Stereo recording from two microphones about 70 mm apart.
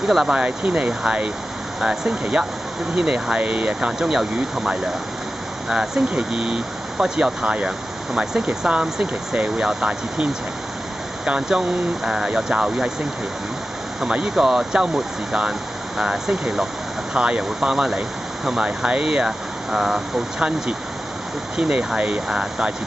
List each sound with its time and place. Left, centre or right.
0.0 s speech: centre
0.4 s speech: centre
14.0 s speech: centre
16.0 s speech: centre